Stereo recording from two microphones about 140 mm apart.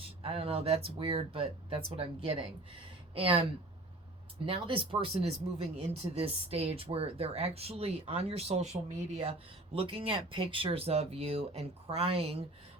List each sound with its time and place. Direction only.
0.2 s speech: 45° right (ahead or behind)
4.4 s speech: 40° right (ahead or behind)
9.7 s speech: 40° right (ahead or behind)